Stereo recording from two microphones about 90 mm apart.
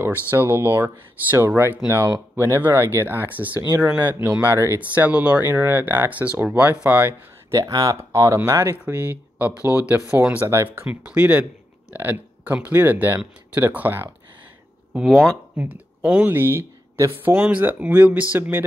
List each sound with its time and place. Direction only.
0.0 s speech: 20° right (ahead or behind)
4.3 s speech: 35° right (ahead or behind)
4.7 s speech: 15° right (ahead or behind)
7.5 s speech: 45° right (ahead or behind); by 10.9 s 25° right (ahead or behind)
10.9 s speech: 15° right (ahead or behind)
15.0 s speech: centre (ahead or behind)
16.0 s speech: 15° right (ahead or behind)
16.3 s speech: 25° right (ahead or behind)
17.3 s speech: 15° right (ahead or behind)